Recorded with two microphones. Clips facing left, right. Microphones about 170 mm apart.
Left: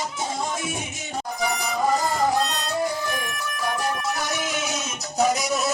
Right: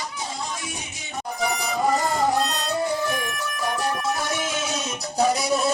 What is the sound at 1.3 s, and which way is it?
Music, centre (ahead or behind).